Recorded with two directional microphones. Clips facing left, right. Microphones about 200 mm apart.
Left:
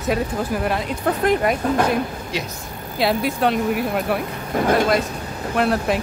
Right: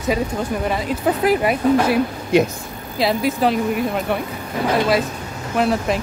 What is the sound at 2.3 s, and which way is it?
Speech, 50° right (ahead or behind).